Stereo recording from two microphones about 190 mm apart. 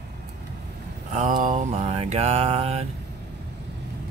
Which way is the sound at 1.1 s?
40° right (ahead or behind).